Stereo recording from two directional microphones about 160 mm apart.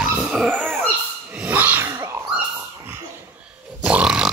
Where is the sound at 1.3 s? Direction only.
10° right (ahead or behind).